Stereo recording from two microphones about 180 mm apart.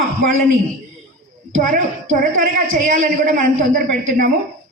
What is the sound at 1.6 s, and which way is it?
A woman's voice, 50° right (ahead or behind).